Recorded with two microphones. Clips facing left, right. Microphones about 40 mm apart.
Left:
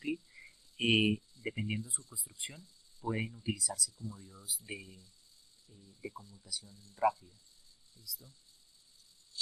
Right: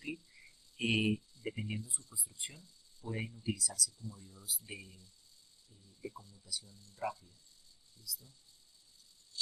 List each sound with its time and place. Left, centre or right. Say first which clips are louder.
0.8 s speech: left 3 dB; left
6.0 s speech: left 1 dB; left
7.0 s speech: left 9 dB; left